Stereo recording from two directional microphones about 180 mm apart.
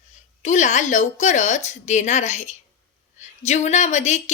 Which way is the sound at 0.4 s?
40° left (ahead or behind).